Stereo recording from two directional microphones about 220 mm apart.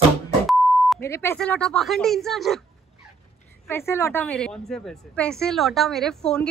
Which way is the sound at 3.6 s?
10° left (ahead or behind).